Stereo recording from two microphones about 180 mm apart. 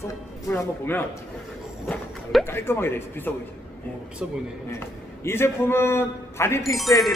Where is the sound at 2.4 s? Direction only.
10° left (ahead or behind).